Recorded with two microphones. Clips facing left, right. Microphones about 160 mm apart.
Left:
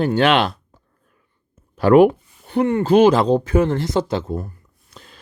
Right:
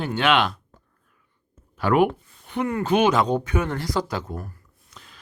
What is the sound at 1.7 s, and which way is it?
Speech, 35° left (ahead or behind).